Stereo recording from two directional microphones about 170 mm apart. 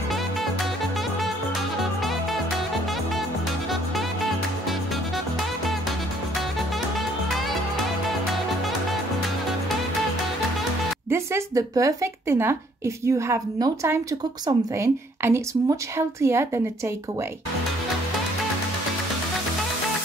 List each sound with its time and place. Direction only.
11.1 s speech: 15° right (ahead or behind)